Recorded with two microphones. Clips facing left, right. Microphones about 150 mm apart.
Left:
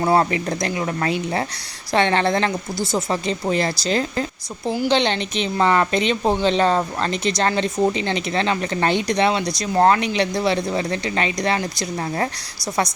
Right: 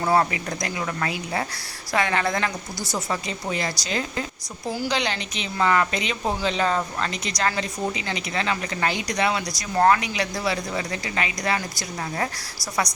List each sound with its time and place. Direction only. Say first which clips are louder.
0.0 s a woman's voice: left 3 dB; 25° left (ahead or behind)
4.6 s a woman's voice: left 6 dB; 20° left (ahead or behind)